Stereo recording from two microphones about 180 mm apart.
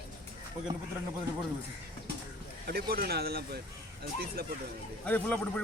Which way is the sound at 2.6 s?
55° right (ahead or behind).